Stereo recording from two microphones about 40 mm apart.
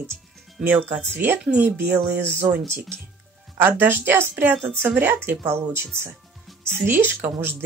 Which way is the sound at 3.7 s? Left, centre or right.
Right.